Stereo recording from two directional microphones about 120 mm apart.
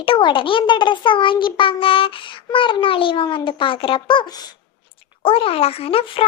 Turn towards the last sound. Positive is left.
turn(degrees=50)  # may be behind; listen again after turning